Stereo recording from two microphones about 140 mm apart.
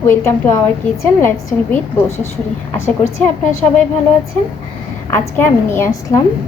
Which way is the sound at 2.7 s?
20° left (ahead or behind).